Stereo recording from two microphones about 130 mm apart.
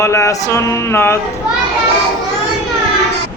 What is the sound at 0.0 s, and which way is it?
Speech, 25° left (ahead or behind).